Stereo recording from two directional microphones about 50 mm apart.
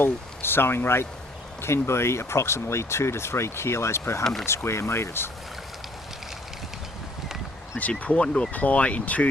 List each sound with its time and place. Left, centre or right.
0.0 s speech: left
4.2 s speech: centre
4.4 s speech: left
7.8 s speech: left